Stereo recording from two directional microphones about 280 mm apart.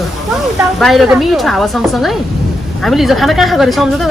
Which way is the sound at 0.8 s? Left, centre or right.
Centre.